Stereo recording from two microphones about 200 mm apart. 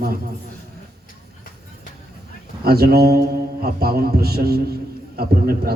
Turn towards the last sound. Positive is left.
turn(degrees=-50)  # may be behind; listen again after turning